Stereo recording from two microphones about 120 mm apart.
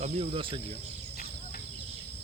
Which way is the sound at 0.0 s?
55° right (ahead or behind).